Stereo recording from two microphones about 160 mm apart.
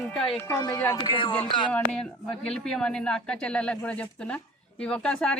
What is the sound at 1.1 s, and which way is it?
Speech, 35° left (ahead or behind).